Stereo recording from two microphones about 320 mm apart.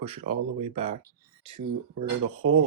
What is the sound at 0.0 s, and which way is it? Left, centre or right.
Speech, centre.